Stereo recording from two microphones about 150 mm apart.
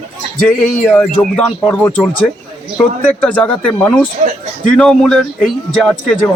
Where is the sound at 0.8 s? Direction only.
5° left (ahead or behind).